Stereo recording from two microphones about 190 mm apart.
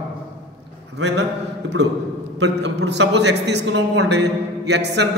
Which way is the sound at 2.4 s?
65° right (ahead or behind).